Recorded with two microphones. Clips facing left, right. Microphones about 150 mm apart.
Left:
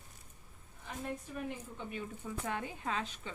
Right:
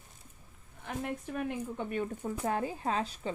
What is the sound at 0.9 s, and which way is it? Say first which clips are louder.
Speech: right 5 dB; 65° right (ahead or behind).